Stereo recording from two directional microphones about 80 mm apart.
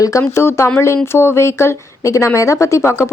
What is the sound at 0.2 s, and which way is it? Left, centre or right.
A woman's voice, left.